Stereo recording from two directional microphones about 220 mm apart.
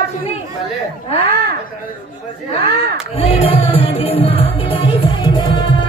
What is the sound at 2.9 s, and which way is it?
Music, 25° left (ahead or behind).